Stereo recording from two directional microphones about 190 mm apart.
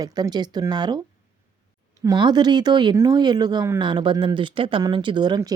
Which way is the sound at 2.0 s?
20° right (ahead or behind).